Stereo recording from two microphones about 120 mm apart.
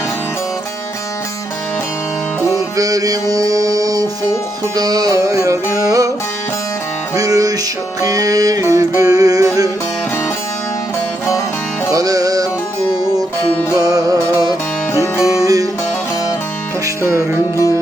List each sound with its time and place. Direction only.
2.7 s music: 30° right (ahead or behind)
7.2 s music: 30° right (ahead or behind)
11.9 s music: 30° right (ahead or behind)
13.7 s music: 30° right (ahead or behind)
14.9 s music: 25° left (ahead or behind)